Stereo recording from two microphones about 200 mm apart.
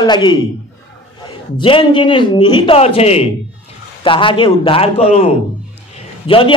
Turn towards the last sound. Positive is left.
turn(degrees=25)  # may be behind; listen again after turning